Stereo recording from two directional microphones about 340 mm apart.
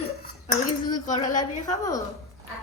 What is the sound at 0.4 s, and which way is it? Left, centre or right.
Dishes, left.